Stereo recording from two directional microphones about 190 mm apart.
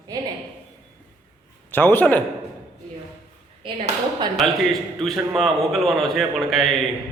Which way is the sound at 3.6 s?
25° right (ahead or behind).